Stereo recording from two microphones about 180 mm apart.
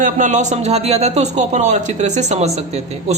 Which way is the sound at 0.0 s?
45° right (ahead or behind).